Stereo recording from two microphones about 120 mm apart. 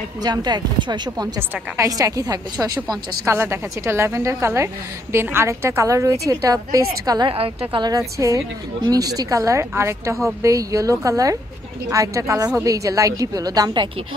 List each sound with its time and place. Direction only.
0.2 s speech: 35° right (ahead or behind)
3.3 s speech: 20° right (ahead or behind)
7.2 s a woman's voice: 50° right (ahead or behind)
7.9 s speech: 30° right (ahead or behind)